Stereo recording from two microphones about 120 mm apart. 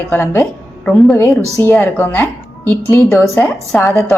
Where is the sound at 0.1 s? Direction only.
20° left (ahead or behind).